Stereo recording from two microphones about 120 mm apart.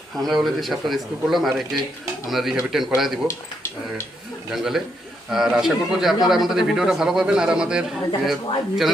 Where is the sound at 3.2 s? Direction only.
20° left (ahead or behind).